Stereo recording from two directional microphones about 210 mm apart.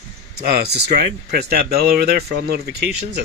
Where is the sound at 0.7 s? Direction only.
50° right (ahead or behind).